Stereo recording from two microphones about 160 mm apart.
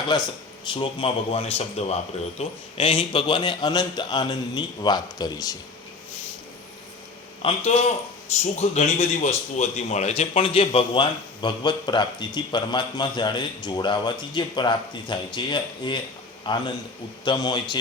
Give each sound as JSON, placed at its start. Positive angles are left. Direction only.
{"t": 0.1, "sound": "a man's voice", "side_deg": 25}
{"t": 7.4, "sound": "a man's voice", "side_deg": 40}